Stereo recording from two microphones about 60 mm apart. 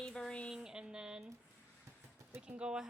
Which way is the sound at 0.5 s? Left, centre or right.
Centre.